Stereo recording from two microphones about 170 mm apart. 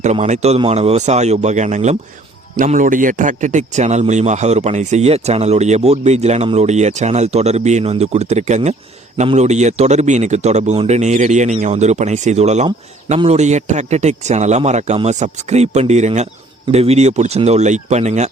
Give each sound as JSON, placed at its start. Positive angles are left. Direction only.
{"t": 0.0, "sound": "speech", "side_deg": -40}